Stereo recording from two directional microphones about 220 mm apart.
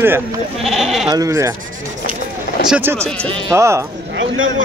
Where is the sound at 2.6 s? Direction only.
5° right (ahead or behind).